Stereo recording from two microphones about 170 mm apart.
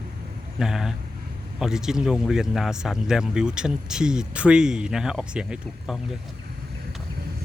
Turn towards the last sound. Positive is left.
turn(degrees=-5)  # may be behind; listen again after turning